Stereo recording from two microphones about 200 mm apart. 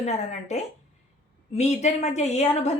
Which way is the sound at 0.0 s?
35° left (ahead or behind).